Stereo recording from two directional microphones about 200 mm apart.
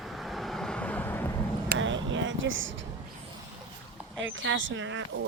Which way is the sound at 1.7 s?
65° right (ahead or behind).